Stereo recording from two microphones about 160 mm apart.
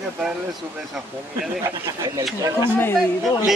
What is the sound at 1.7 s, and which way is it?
Speech, 20° right (ahead or behind).